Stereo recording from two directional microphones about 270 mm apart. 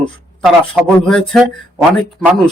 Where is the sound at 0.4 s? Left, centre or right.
Centre.